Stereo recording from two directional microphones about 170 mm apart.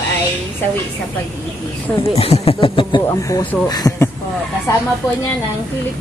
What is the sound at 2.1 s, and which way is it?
A woman's voice, 35° left (ahead or behind).